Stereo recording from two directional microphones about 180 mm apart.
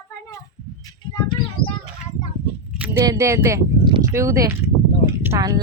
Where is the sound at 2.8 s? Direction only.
15° right (ahead or behind).